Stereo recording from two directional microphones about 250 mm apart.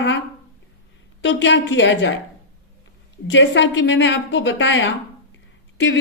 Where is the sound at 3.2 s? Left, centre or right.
Left.